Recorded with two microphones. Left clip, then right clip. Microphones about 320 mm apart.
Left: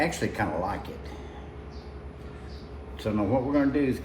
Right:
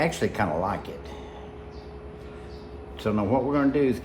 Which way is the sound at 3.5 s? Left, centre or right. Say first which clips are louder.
Right 2 dB; right.